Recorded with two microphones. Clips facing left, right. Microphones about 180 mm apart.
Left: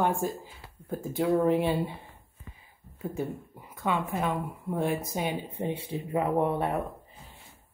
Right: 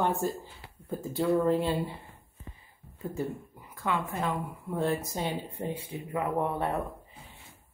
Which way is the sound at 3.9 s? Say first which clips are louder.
Left 2 dB; 20° left (ahead or behind).